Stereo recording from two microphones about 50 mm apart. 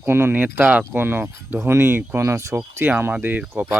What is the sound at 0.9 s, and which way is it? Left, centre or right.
Speech, right.